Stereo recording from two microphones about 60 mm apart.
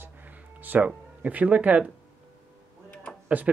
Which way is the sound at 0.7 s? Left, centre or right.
Right.